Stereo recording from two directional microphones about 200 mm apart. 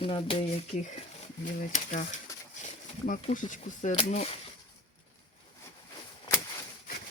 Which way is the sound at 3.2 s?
35° left (ahead or behind).